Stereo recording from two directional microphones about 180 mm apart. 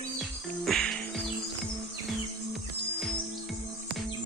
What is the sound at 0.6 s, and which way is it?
Music, centre (ahead or behind).